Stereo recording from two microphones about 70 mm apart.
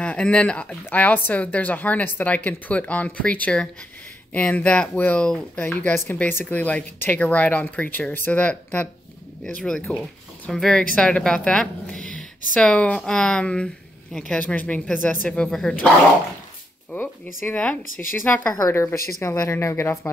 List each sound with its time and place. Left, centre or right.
0.0 s a woman's voice: centre
14.4 s a woman's voice: left
16.9 s a woman's voice: left
18.7 s a woman's voice: left